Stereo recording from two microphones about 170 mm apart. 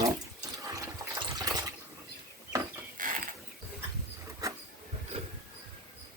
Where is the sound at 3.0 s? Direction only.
55° right (ahead or behind).